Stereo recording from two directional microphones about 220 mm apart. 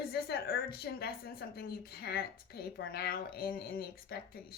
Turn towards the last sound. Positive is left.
turn(degrees=45)  # may be behind; listen again after turning